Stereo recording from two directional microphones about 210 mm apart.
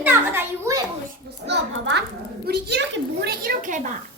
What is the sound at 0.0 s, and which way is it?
Children playing, 10° right (ahead or behind).